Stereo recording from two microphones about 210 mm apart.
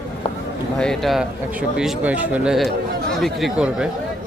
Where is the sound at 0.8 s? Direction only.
Centre (ahead or behind).